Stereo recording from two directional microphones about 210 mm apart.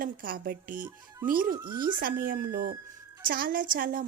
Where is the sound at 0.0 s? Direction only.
40° right (ahead or behind).